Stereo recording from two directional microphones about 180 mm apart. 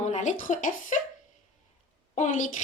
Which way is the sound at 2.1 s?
45° left (ahead or behind).